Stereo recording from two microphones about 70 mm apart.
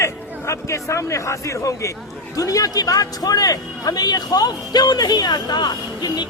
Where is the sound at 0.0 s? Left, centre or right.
Left.